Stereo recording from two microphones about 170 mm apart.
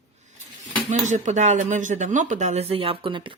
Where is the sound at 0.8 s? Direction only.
45° right (ahead or behind).